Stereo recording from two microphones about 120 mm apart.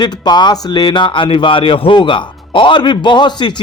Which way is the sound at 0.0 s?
35° left (ahead or behind).